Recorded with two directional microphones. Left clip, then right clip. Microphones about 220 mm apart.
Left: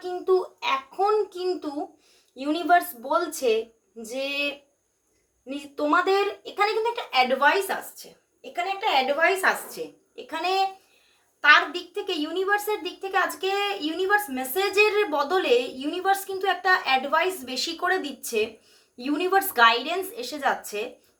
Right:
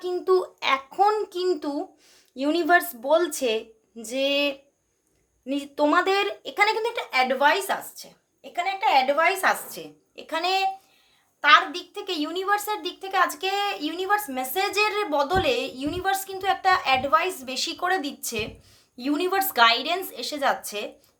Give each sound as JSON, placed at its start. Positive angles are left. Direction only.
{"t": 0.3, "sound": "a sound", "side_deg": -50}
{"t": 2.4, "sound": "speech", "side_deg": -50}
{"t": 8.5, "sound": "a woman's voice", "side_deg": -30}
{"t": 10.2, "sound": "a woman's voice", "side_deg": -40}